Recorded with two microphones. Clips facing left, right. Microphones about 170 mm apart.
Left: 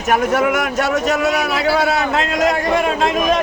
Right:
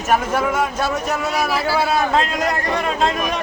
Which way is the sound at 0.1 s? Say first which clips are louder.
Left 3 dB; 70° left (ahead or behind).